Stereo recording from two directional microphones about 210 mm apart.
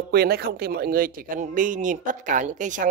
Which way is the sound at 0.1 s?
50° right (ahead or behind).